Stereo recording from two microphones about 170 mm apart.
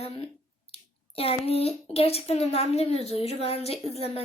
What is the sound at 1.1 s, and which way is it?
A woman's voice, 35° left (ahead or behind).